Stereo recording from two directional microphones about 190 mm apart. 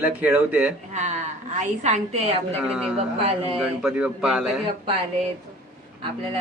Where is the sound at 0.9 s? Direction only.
40° right (ahead or behind).